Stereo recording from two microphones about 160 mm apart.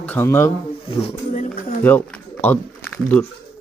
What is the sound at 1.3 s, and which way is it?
Speech, 50° left (ahead or behind).